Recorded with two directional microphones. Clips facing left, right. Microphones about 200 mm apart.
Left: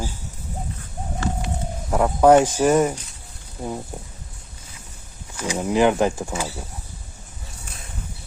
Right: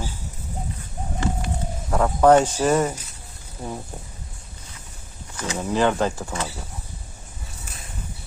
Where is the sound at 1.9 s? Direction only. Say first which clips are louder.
Left 1 dB; 10° left (ahead or behind).